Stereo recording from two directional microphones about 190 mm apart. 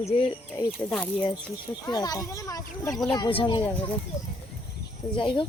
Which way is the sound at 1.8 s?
20° left (ahead or behind).